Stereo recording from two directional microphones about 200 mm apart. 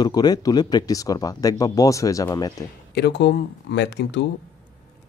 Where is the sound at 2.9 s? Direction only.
55° left (ahead or behind).